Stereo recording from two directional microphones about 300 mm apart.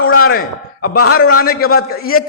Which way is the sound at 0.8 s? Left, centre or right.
Left.